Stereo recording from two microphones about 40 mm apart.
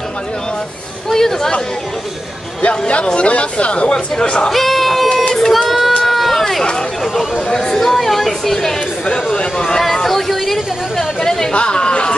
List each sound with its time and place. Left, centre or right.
1.1 s speech: centre
3.1 s speech: left
3.9 s speech: centre
4.5 s speech: centre
5.1 s a sound: centre
5.5 s a sound: centre
6.0 s run: centre
7.4 s speech: centre
7.8 s a woman's voice: centre
9.1 s speech: left
11.5 s chatter: left